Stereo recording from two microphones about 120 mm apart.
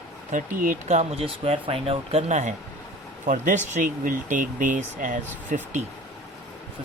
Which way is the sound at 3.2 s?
90° right.